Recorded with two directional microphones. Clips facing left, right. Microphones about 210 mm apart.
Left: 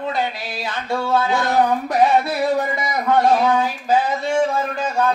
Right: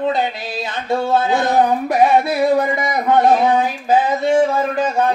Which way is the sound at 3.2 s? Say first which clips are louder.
Right 2 dB; 20° right (ahead or behind).